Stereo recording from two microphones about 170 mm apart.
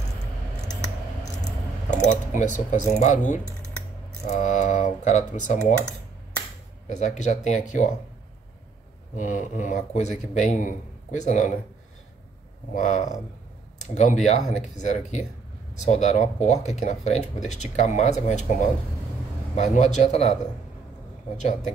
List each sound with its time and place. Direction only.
1.9 s speech: 45° left (ahead or behind)
6.9 s speech: 45° left (ahead or behind)
9.1 s speech: 50° left (ahead or behind)
12.7 s speech: 45° left (ahead or behind)
21.4 s speech: 45° left (ahead or behind)